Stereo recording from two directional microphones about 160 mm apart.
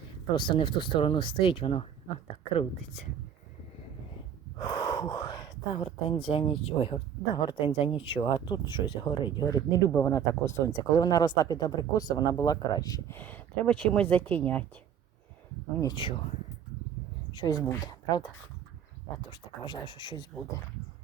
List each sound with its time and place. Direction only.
0.3 s speech: 30° left (ahead or behind)
4.6 s speech: 25° left (ahead or behind); by 14.7 s 10° left (ahead or behind)
15.7 s speech: 20° left (ahead or behind)
16.0 s speech: 30° left (ahead or behind)
17.3 s speech: 25° left (ahead or behind)
19.2 s speech: 30° left (ahead or behind)